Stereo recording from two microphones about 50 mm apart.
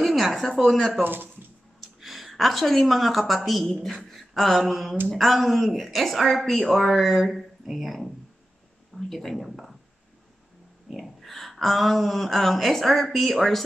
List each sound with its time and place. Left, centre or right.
0.0 s a sound: centre
0.5 s speech: centre
1.0 s speech: right
2.0 s a woman's voice: centre
10.9 s speech: centre